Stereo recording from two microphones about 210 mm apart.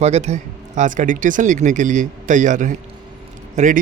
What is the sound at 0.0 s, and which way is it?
Speech, 30° right (ahead or behind).